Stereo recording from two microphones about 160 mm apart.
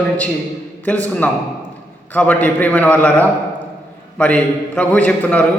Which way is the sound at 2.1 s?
10° left (ahead or behind).